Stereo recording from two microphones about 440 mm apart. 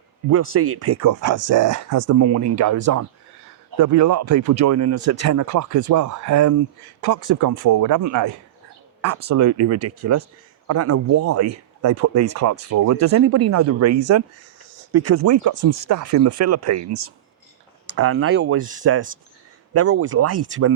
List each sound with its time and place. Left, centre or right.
0.3 s speech: right